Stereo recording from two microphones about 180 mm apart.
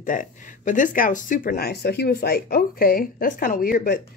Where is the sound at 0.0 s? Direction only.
45° left (ahead or behind).